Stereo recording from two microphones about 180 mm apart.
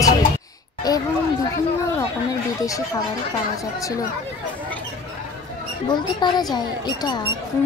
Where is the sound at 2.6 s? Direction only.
20° left (ahead or behind).